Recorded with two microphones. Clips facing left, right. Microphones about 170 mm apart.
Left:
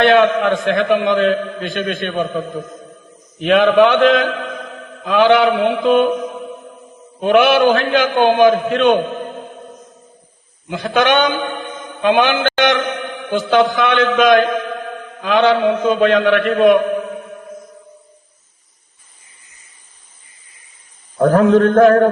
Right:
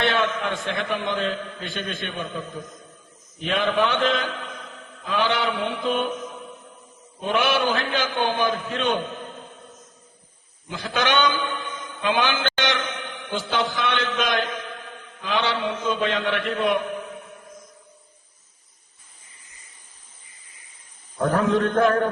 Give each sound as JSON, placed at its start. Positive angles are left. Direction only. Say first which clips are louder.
{"t": 0.0, "sound": "a man's voice", "louder": "left 11 dB", "side_deg": 65}
{"t": 6.2, "sound": "music", "louder": "left 10 dB", "side_deg": 65}
{"t": 10.7, "sound": "a man's voice", "louder": "left 9 dB", "side_deg": 60}
{"t": 21.2, "sound": "a man's voice", "louder": "left 9 dB", "side_deg": 90}
{"t": 21.6, "sound": "a man's voice", "louder": "left 10 dB", "side_deg": 55}